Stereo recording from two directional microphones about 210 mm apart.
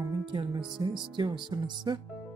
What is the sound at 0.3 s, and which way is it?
Speech, 20° right (ahead or behind).